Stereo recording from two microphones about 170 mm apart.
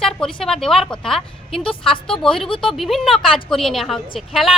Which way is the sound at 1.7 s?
30° left (ahead or behind).